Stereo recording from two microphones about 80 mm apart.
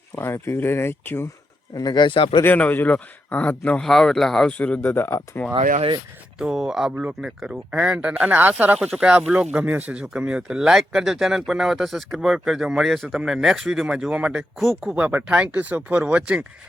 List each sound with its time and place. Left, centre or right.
0.2 s speech: left
1.7 s speech: left
2.6 s a man's voice: centre
3.8 s speech: centre
4.4 s speech: centre; by 5.4 s left
6.4 s speech: centre